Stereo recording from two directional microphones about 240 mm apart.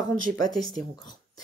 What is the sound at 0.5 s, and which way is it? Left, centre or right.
Speech, centre.